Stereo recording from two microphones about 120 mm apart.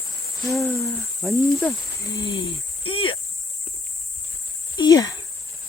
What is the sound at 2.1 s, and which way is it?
Speech, 40° left (ahead or behind).